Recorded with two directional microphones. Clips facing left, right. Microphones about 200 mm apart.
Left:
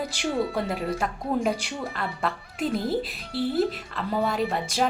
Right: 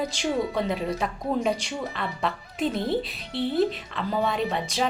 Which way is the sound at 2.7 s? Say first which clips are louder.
Even; 25° right (ahead or behind).